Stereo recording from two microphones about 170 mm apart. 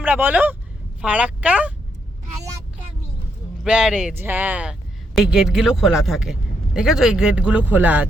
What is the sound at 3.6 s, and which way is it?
Speech, 5° right (ahead or behind).